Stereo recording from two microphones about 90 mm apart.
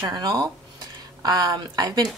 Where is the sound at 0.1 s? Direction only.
45° right (ahead or behind).